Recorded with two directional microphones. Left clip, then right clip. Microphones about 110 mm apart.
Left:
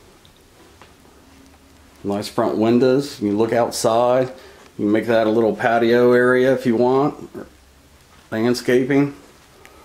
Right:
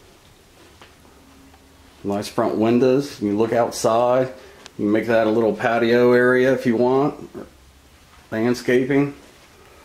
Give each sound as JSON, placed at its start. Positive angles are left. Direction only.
{"t": 2.0, "sound": "speech", "side_deg": 10}